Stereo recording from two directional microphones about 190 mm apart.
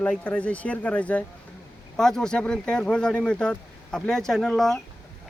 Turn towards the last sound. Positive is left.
turn(degrees=0)  # may be behind; listen again after turning